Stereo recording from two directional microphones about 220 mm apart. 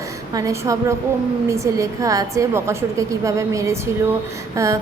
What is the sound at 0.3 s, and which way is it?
A woman's voice, 15° right (ahead or behind).